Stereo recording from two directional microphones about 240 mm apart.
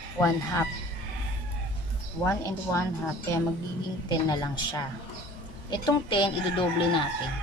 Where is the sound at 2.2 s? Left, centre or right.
Centre.